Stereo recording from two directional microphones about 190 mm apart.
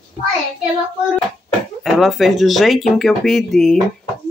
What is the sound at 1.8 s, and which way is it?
Speech, centre (ahead or behind).